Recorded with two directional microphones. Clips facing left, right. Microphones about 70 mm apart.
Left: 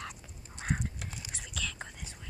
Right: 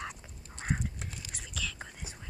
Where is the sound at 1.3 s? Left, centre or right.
Centre.